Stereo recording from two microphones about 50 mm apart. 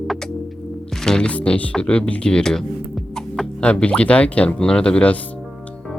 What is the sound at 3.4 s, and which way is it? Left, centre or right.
Speech, left.